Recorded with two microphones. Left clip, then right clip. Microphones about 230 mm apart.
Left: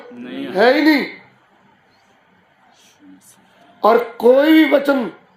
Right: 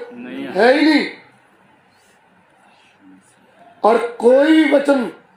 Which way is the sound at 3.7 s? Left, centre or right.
Left.